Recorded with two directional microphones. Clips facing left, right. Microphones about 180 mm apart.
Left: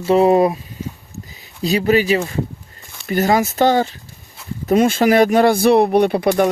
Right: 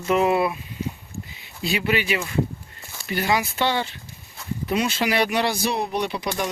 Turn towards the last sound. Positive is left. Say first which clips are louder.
# left 11 dB
turn(degrees=55)  # may be behind; listen again after turning